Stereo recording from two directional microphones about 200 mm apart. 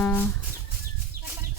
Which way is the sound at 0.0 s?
10° left (ahead or behind).